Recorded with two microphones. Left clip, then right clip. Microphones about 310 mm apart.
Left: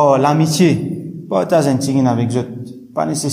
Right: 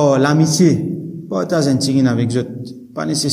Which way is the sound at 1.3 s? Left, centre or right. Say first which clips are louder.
Left 4 dB; left.